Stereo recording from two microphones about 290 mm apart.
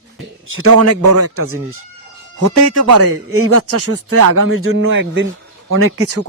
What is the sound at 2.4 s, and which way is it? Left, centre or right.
Speech, right.